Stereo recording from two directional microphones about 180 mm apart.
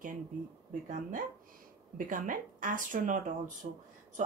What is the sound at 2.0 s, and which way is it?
A woman's voice, 50° right (ahead or behind).